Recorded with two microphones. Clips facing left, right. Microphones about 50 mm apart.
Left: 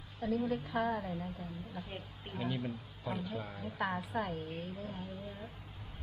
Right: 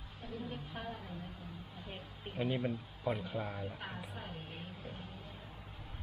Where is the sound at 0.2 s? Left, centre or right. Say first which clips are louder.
Left 10 dB; left.